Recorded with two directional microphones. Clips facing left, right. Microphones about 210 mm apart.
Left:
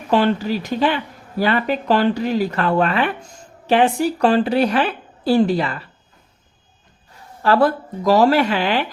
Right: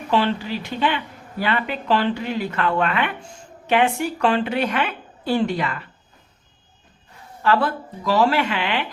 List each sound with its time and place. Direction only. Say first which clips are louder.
0.1 s speech: left 4 dB; 45° left (ahead or behind)
7.4 s speech: left 4 dB; 40° left (ahead or behind)